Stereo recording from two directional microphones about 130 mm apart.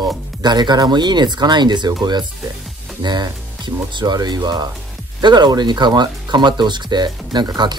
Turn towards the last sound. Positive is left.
turn(degrees=-35)  # may be behind; listen again after turning